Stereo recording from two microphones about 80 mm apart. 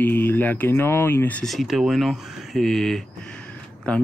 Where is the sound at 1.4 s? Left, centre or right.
Centre.